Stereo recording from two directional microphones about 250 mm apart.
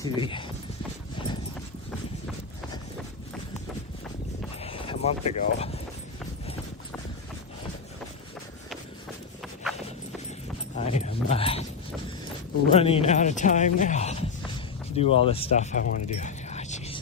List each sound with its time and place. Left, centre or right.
0.0 s speech: centre
4.6 s a sound: left
10.8 s speech: left
12.7 s speech: left